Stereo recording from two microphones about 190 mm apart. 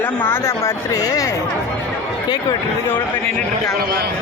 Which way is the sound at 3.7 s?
55° right (ahead or behind).